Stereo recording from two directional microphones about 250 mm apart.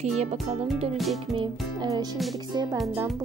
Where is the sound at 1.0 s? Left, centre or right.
Centre.